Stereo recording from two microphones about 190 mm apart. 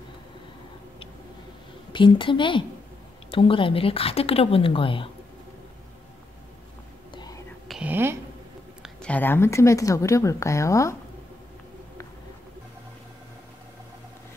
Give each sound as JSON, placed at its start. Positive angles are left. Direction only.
{"t": 1.9, "sound": "speech", "side_deg": 25}
{"t": 7.2, "sound": "whispering", "side_deg": 20}
{"t": 7.6, "sound": "a sound", "side_deg": -5}
{"t": 8.8, "sound": "speech", "side_deg": 5}